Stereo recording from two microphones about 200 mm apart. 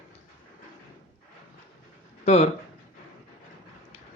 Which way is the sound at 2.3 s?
35° left (ahead or behind).